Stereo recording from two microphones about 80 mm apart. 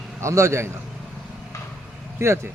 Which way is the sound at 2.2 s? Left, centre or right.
Right.